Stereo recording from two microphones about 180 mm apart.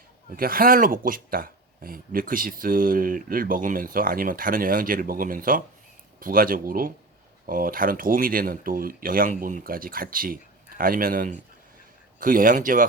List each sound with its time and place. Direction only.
0.3 s speech: 55° right (ahead or behind)